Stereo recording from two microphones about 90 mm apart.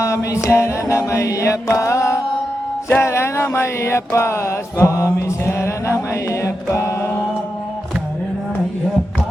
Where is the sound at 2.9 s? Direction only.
25° left (ahead or behind).